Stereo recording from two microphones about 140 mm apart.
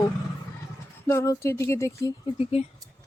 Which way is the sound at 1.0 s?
20° left (ahead or behind).